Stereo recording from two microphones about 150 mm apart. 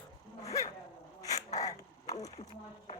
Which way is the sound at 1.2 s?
25° left (ahead or behind).